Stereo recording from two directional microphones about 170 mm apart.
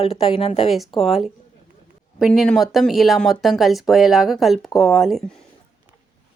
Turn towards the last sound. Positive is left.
turn(degrees=0)  # may be behind; listen again after turning